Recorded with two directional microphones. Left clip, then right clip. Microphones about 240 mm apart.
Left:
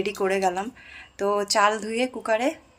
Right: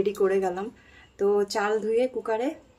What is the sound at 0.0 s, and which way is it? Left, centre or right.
Speech, centre.